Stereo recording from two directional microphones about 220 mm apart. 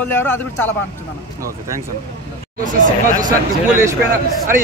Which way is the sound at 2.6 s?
35° right (ahead or behind).